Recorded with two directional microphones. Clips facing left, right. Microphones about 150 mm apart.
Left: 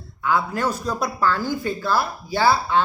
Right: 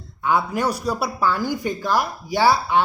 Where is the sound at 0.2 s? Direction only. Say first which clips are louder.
Right 1 dB; 20° right (ahead or behind).